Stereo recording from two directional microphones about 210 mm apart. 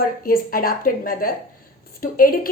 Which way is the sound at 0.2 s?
45° left (ahead or behind).